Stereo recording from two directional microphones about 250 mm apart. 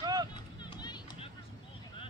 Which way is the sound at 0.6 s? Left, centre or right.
Centre.